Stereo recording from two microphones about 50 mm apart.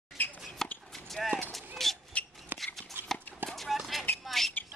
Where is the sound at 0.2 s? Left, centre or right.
Left.